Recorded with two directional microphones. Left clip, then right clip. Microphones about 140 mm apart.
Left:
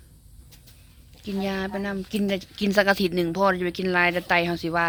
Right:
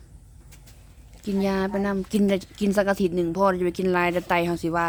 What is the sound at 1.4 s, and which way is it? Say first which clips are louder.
Speech: right 3 dB; 35° right (ahead or behind).